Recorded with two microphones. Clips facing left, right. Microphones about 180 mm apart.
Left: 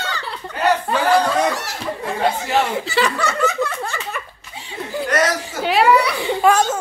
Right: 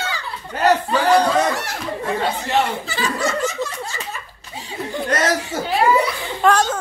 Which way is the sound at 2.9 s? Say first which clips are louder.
Left 2 dB; 65° left (ahead or behind).